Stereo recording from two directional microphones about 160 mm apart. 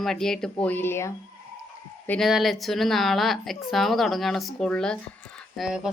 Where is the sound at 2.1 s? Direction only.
Centre (ahead or behind).